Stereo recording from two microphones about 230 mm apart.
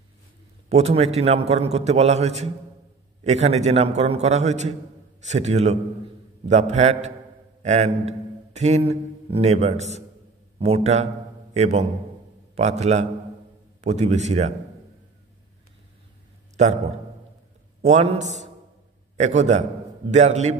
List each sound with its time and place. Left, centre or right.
0.7 s a man's voice: right
16.5 s a man's voice: right